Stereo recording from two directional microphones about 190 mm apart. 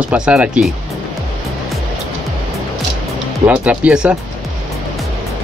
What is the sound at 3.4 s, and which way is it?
Speech, 5° right (ahead or behind).